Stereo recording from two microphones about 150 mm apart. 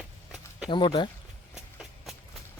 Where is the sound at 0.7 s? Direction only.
30° left (ahead or behind).